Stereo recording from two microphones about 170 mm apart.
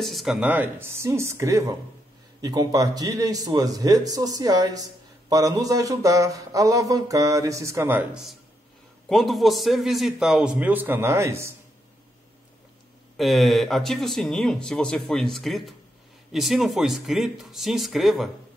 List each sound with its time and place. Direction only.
0.0 s speech: centre (ahead or behind); by 11.5 s 15° right (ahead or behind)
13.2 s speech: centre (ahead or behind)